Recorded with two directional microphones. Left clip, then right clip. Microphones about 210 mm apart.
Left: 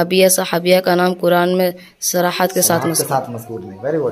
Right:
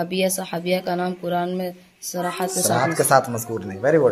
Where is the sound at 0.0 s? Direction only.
50° left (ahead or behind).